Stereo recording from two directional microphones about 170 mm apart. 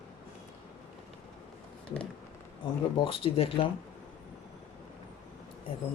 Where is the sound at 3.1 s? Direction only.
30° left (ahead or behind).